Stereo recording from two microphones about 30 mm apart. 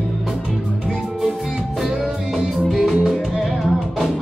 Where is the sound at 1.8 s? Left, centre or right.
Centre.